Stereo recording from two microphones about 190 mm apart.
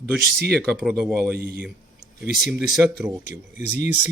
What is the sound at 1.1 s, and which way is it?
Speech, 55° right (ahead or behind).